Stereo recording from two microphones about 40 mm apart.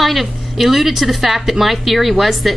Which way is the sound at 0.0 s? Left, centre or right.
Centre.